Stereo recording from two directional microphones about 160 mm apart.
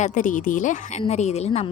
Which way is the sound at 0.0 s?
50° left (ahead or behind).